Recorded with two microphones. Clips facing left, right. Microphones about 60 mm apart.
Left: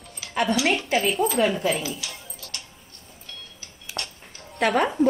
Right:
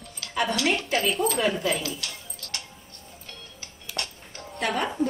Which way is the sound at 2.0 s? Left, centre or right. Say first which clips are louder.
Left 1 dB; centre.